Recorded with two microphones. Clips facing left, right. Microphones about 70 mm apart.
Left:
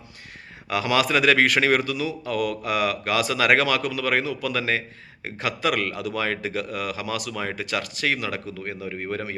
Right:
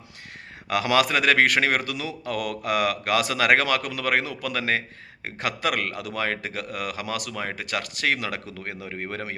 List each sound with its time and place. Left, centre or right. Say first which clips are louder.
0.7 s a man's voice: even; right
3.3 s a man's voice: left 2 dB; right
7.3 s a man's voice: left 2 dB; right
8.9 s a man's voice: left 3 dB; right